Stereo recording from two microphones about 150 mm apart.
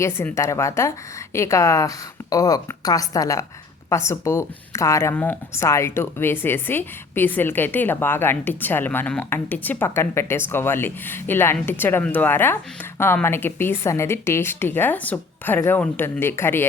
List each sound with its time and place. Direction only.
0.0 s a woman's voice: 20° left (ahead or behind)